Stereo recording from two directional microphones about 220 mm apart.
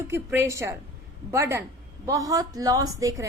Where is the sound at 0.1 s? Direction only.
10° right (ahead or behind).